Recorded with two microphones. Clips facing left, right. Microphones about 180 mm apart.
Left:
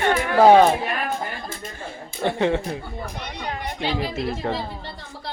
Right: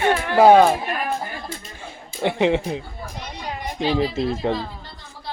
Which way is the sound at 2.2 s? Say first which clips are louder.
Right 2 dB; 15° right (ahead or behind).